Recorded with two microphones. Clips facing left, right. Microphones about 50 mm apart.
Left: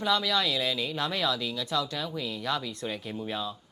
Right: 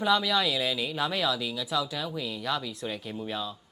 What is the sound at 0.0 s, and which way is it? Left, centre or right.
Speech, centre.